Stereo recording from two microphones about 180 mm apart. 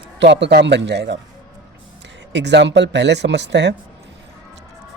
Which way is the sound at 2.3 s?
75° right (ahead or behind).